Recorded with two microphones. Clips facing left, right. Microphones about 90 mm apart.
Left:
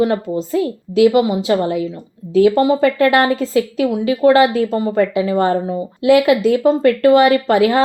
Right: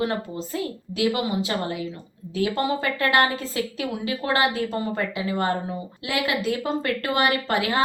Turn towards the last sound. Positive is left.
turn(degrees=30)  # may be behind; listen again after turning